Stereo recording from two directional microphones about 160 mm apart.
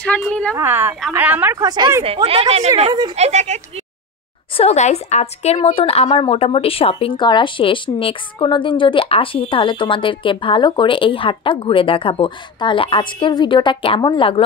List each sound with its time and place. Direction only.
0.0 s a woman's voice: 5° left (ahead or behind)
0.6 s a woman's voice: 15° right (ahead or behind)
2.2 s speech: 40° right (ahead or behind)
4.6 s a woman's voice: 45° left (ahead or behind)